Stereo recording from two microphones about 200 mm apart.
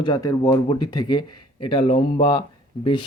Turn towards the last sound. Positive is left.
turn(degrees=25)  # may be behind; listen again after turning